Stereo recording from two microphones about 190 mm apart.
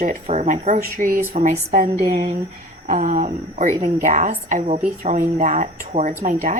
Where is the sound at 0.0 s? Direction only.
40° right (ahead or behind).